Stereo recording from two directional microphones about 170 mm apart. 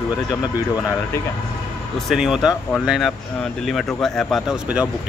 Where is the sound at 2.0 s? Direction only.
Centre (ahead or behind).